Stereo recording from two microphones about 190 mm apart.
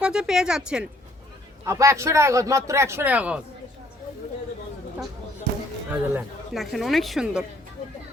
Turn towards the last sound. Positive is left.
turn(degrees=-5)  # may be behind; listen again after turning